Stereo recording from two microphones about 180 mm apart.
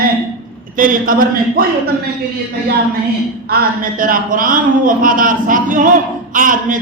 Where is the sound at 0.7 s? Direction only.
50° right (ahead or behind).